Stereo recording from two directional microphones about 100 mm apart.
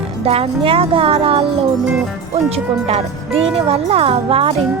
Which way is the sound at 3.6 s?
80° right.